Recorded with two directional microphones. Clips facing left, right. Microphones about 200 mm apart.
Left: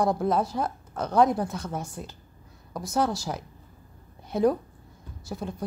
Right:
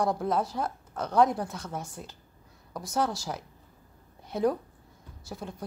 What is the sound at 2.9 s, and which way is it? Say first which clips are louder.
Speech: left 3 dB; 10° left (ahead or behind).